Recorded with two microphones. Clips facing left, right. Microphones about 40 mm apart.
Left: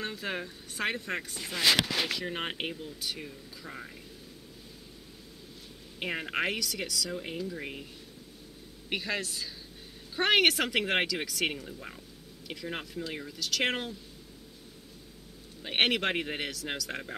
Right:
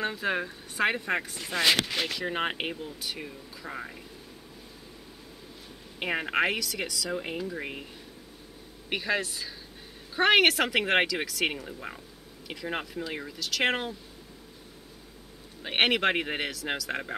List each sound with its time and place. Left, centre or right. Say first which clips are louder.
0.0 s speech: right 6 dB; centre
2.0 s speech: even; centre
2.2 s speech: right 4 dB; centre
3.3 s speech: right 4 dB; right
5.9 s speech: right 5 dB; centre
7.1 s speech: right 3 dB; centre
8.9 s speech: right 4 dB; centre
12.6 s speech: right 4 dB; centre
13.4 s speech: right 3 dB; centre
15.6 s speech: right 3 dB; centre